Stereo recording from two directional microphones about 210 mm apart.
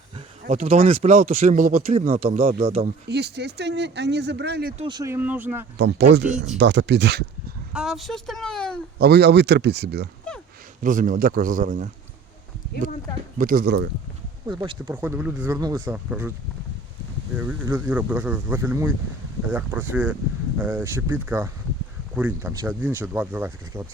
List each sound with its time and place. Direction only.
0.4 s speech: 35° right (ahead or behind)
2.6 s speech: 25° right (ahead or behind)
2.8 s speech: 50° right (ahead or behind)
4.8 s speech: 20° right (ahead or behind)
5.7 s speech: 55° right (ahead or behind)
7.7 s speech: 5° right (ahead or behind)
9.0 s speech: 50° right (ahead or behind)
10.8 s speech: 40° right (ahead or behind)
13.4 s speech: 40° right (ahead or behind)
14.5 s speech: 20° right (ahead or behind)
14.9 s speech: 10° right (ahead or behind)
17.3 s speech: 10° right (ahead or behind)